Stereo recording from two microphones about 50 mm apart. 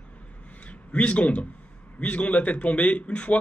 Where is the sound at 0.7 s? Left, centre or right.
Left.